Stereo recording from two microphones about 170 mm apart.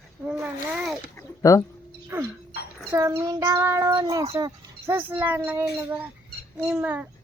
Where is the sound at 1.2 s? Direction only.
20° left (ahead or behind).